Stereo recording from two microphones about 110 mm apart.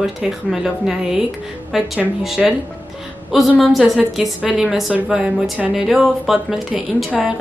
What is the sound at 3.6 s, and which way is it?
Speech, centre (ahead or behind).